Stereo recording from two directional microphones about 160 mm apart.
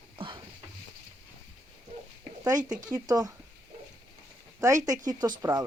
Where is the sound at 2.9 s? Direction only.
25° right (ahead or behind).